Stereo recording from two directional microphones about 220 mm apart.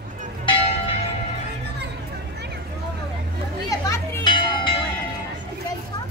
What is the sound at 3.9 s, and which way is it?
Church bell, 15° left (ahead or behind).